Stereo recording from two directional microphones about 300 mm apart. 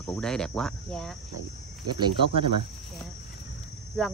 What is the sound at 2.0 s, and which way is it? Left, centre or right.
Speech, centre.